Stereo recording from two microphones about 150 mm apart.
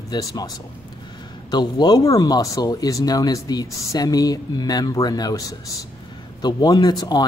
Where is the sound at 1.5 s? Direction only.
30° left (ahead or behind).